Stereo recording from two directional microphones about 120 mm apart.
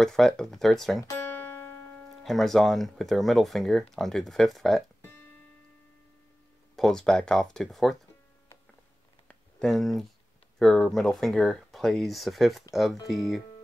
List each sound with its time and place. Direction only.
0.0 s speech: 5° left (ahead or behind)
1.3 s music: 15° left (ahead or behind)
2.2 s speech: centre (ahead or behind)
6.7 s speech: 5° left (ahead or behind)
9.3 s a sound: 5° left (ahead or behind)
10.6 s speech: 5° left (ahead or behind)